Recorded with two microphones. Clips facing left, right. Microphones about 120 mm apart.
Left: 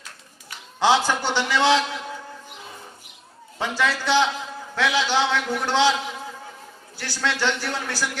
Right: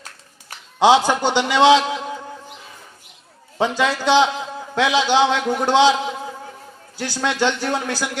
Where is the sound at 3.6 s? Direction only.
20° right (ahead or behind).